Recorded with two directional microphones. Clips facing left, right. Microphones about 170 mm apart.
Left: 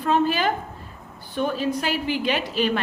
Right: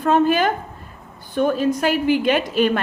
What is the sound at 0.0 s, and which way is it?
Speech, 50° right (ahead or behind).